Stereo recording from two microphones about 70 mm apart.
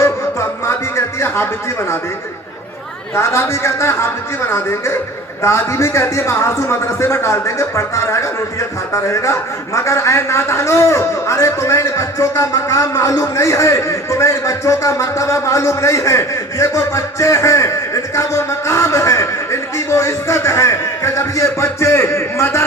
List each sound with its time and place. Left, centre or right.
0.0 s music: left
3.2 s a man's voice: left